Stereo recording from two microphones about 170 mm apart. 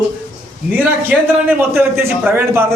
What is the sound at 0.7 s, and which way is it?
A man's voice, 10° right (ahead or behind).